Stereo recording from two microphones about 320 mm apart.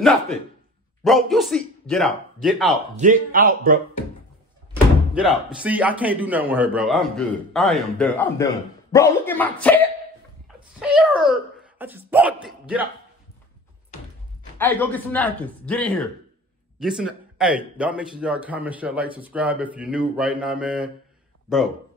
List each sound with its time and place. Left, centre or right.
1.0 s speech: centre
3.0 s speech: right
5.1 s speech: centre
14.6 s speech: centre